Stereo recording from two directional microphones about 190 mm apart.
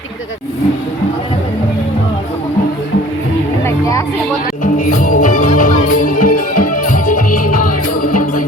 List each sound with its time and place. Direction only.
3.6 s music: 15° left (ahead or behind)
4.6 s music: 45° left (ahead or behind)